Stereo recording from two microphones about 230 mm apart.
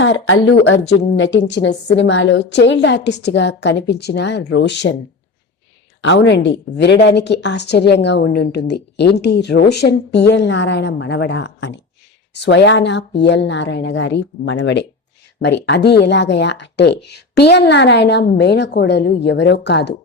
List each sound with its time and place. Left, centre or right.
0.0 s a woman's voice: left
6.0 s a woman's voice: left